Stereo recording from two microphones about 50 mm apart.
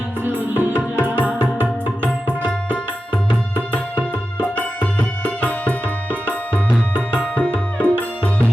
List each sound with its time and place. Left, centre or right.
0.3 s music: right
3.7 s music: right
4.8 s music: left